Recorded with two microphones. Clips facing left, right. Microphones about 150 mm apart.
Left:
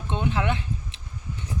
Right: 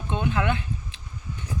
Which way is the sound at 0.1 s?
30° left (ahead or behind).